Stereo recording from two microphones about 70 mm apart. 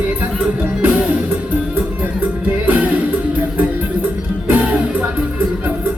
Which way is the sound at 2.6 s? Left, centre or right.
Right.